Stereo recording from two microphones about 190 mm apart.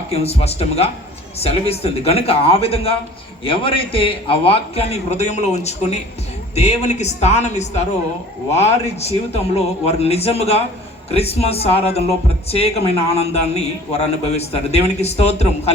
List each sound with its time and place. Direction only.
0.1 s a man's voice: 35° left (ahead or behind)